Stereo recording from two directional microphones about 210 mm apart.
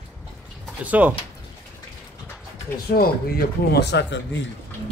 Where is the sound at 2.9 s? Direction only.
45° left (ahead or behind).